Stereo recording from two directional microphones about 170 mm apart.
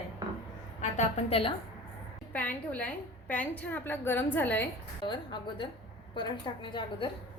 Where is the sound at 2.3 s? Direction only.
10° left (ahead or behind).